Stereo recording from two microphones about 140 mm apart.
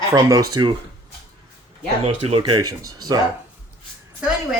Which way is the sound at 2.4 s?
30° right (ahead or behind).